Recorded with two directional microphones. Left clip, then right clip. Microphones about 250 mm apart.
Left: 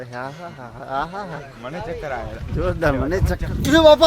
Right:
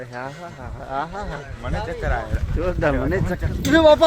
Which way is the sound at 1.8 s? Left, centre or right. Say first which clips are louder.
Right 1 dB; right.